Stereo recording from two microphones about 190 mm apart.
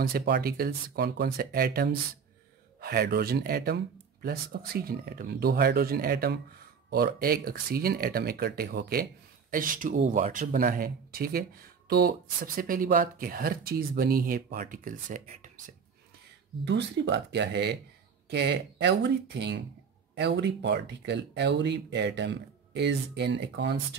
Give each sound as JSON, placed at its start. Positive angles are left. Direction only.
{"t": 0.0, "sound": "speech", "side_deg": -55}
{"t": 16.6, "sound": "speech", "side_deg": -65}